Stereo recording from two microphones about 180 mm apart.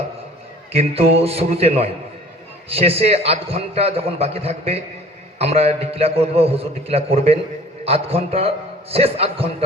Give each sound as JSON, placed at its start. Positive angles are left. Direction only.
{"t": 0.7, "sound": "a man's voice", "side_deg": -35}